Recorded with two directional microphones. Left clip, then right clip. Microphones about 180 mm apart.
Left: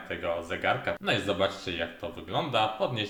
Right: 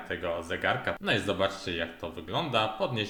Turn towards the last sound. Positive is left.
turn(degrees=-10)  # may be behind; listen again after turning